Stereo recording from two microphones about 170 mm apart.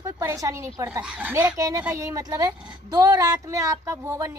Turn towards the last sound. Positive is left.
turn(degrees=-20)  # may be behind; listen again after turning